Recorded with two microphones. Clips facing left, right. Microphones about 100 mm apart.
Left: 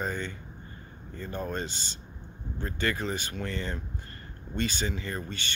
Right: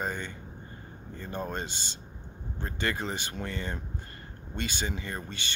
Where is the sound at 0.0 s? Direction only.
15° right (ahead or behind).